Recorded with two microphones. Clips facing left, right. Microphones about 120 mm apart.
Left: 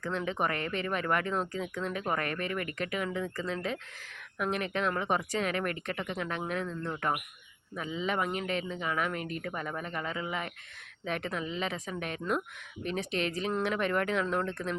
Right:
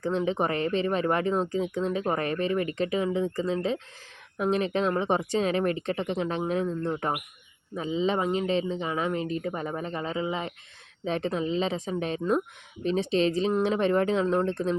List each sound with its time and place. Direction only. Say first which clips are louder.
0.0 s speech: right 6 dB; 25° right (ahead or behind)